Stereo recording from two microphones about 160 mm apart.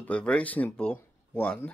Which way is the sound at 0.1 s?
5° left (ahead or behind).